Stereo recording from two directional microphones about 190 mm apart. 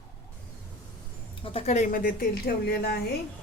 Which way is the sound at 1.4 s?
30° left (ahead or behind).